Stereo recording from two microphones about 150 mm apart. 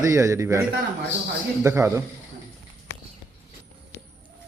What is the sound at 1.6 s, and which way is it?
Speech, 20° right (ahead or behind).